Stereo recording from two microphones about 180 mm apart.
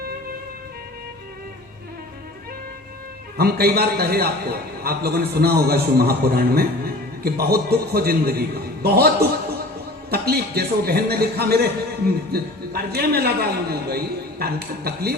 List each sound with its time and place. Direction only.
3.3 s a man's voice: 60° right (ahead or behind)